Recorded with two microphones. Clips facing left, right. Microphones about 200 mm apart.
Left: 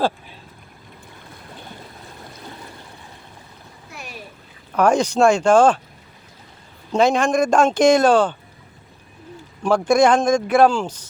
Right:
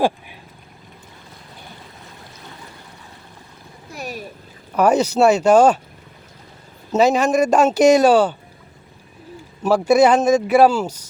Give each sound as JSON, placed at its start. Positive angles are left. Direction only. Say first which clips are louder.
{"t": 3.9, "sound": "boat", "louder": "right 7 dB", "side_deg": -40}
{"t": 4.7, "sound": "a man's voice", "louder": "right 1 dB", "side_deg": -5}
{"t": 6.9, "sound": "a man's voice", "louder": "right 1 dB", "side_deg": -5}
{"t": 9.6, "sound": "a man's voice", "louder": "right 2 dB", "side_deg": -5}